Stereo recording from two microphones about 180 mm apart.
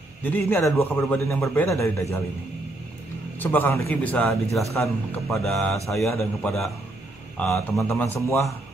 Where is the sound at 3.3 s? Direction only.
10° left (ahead or behind).